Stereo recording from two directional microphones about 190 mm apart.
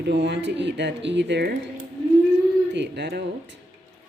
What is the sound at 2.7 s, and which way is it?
Speech, 65° right (ahead or behind).